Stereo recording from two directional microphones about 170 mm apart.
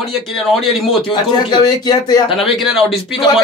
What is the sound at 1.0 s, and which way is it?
Speech, 25° left (ahead or behind).